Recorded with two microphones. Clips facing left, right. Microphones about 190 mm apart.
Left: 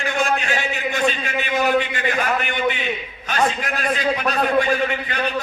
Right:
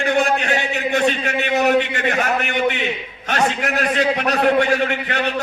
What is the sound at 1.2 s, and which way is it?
A man's voice, 70° right (ahead or behind).